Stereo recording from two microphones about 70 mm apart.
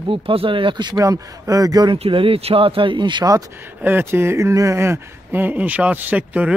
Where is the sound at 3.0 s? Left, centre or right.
Right.